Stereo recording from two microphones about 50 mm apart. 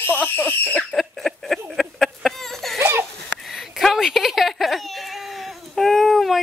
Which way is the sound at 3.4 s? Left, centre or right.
Centre.